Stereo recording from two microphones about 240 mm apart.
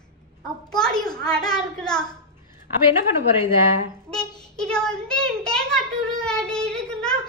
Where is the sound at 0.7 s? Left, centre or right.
Centre.